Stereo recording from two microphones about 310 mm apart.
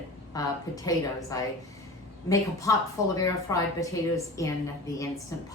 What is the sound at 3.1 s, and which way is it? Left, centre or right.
A woman's voice, centre.